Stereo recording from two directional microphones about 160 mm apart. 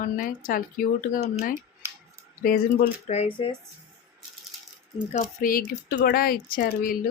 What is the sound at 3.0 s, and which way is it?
Speech, 40° left (ahead or behind).